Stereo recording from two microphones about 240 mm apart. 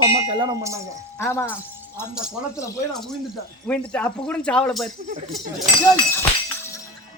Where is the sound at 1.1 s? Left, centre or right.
Centre.